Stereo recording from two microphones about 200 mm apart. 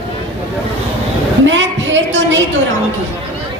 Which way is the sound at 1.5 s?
65° right (ahead or behind).